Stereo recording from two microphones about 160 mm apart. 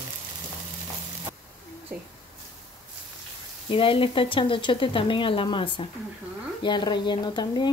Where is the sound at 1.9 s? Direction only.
10° right (ahead or behind).